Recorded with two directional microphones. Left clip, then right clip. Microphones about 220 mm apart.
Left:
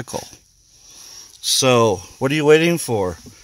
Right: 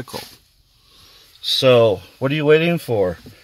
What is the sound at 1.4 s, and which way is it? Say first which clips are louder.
Speech: right 2 dB; 40° left (ahead or behind).